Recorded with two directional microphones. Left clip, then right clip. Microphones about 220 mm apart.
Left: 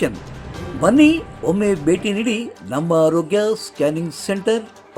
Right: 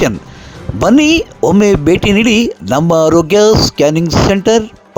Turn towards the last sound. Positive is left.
turn(degrees=-40)  # may be behind; listen again after turning